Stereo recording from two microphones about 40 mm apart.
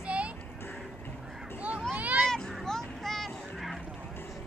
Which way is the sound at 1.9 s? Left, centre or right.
Right.